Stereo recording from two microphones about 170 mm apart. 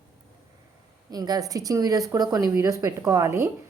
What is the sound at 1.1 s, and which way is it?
A woman's voice, 20° right (ahead or behind).